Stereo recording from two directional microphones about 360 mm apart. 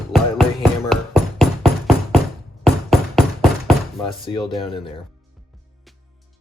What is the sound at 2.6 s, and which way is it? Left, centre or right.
Music, centre.